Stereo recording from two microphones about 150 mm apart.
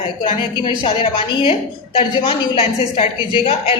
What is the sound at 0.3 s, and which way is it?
A woman's voice, 35° left (ahead or behind).